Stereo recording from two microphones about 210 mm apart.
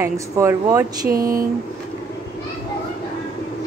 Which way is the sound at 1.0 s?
45° right (ahead or behind).